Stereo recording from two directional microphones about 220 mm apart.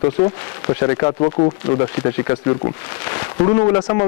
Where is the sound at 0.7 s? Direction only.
20° left (ahead or behind).